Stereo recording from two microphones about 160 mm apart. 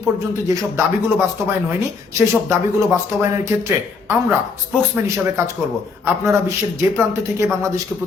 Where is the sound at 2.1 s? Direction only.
15° right (ahead or behind).